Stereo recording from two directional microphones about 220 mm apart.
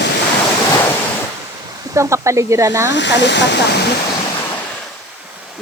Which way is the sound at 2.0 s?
15° right (ahead or behind).